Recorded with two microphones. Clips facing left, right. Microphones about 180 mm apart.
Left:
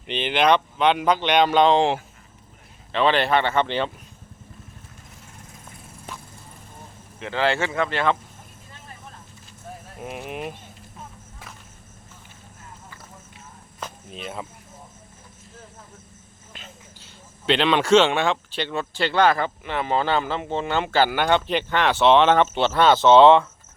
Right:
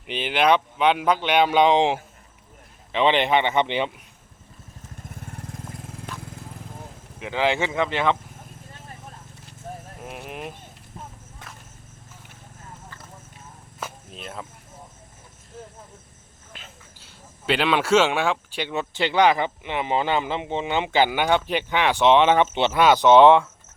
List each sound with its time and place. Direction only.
0.1 s speech: 5° right (ahead or behind)
5.2 s vehicle: 65° right (ahead or behind)
7.2 s speech: 15° right (ahead or behind)
10.0 s speech: centre (ahead or behind)
13.7 s cricket: centre (ahead or behind)
16.5 s speech: centre (ahead or behind)